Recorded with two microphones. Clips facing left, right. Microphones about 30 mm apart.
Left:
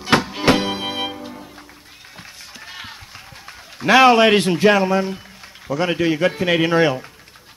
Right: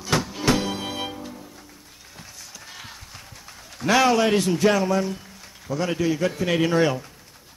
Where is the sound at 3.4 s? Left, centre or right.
Left.